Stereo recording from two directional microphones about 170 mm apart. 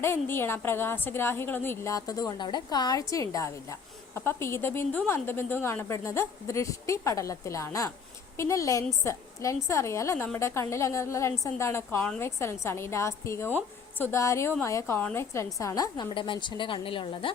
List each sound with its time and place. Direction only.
0.0 s a woman's voice: 15° left (ahead or behind)
11.9 s a woman's voice: 5° left (ahead or behind)
12.2 s a woman's voice: 15° left (ahead or behind); by 17.3 s 30° left (ahead or behind)